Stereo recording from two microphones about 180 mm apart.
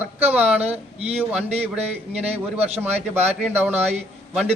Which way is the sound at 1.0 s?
35° right (ahead or behind).